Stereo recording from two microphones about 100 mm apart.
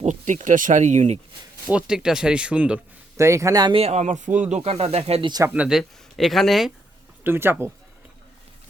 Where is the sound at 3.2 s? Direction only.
30° right (ahead or behind).